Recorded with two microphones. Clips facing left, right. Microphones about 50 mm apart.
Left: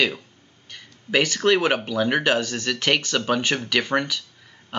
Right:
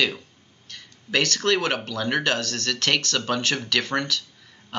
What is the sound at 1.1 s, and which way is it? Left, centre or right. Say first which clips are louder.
A man's voice: left 3 dB; centre.